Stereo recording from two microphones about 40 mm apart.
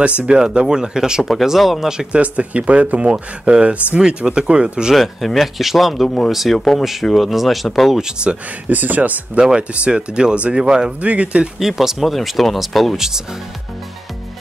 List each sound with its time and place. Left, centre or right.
0.2 s speech: right
1.6 s speech: centre
2.1 s speech: right
4.9 s speech: centre
6.0 s speech: centre
6.8 s speech: centre
8.2 s speech: right
8.6 s speech: right
9.4 s speech: centre
11.0 s speech: right
11.6 s speech: centre